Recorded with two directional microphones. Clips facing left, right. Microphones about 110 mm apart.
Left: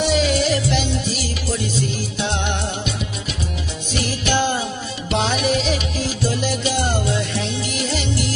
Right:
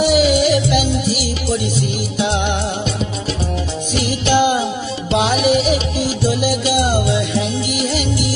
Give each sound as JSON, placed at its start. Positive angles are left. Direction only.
{"t": 0.0, "sound": "music", "side_deg": -10}
{"t": 4.3, "sound": "music", "side_deg": -15}